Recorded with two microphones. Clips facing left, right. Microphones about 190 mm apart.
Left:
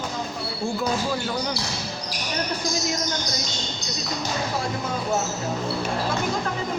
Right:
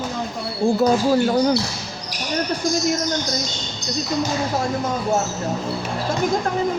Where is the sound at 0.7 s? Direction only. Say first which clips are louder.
Right 9 dB; 40° right (ahead or behind).